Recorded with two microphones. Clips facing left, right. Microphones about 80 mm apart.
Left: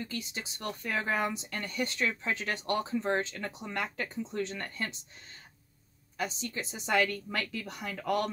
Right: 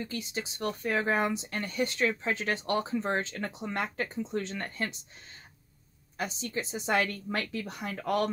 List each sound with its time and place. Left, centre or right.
0.0 s a woman's voice: right
6.1 s a woman's voice: right